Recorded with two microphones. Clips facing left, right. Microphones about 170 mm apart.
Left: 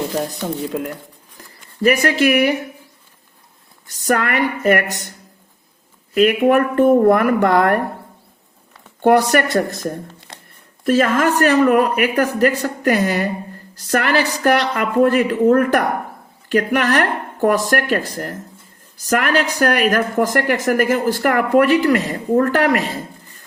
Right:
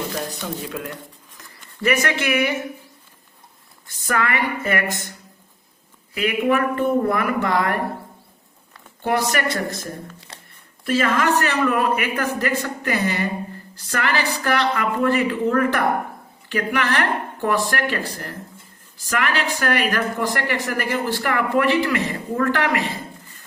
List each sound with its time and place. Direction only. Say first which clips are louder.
1.8 s speech: left 6 dB; 35° left (ahead or behind)
4.0 s a woman's voice: left 5 dB; 45° left (ahead or behind)
6.1 s a woman's voice: left 7 dB; 50° left (ahead or behind)
9.0 s a woman's voice: left 8 dB; 45° left (ahead or behind)
10.8 s a woman's voice: left 4 dB; 45° left (ahead or behind)